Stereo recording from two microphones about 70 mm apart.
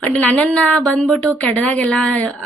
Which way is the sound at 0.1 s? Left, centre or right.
Centre.